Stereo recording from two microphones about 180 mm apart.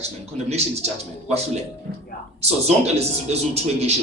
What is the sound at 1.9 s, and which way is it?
Speech, 60° right (ahead or behind).